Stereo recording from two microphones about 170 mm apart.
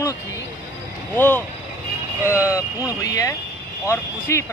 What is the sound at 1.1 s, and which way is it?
Speech, 10° left (ahead or behind).